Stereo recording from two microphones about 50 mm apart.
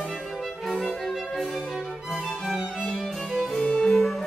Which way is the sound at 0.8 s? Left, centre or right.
Centre.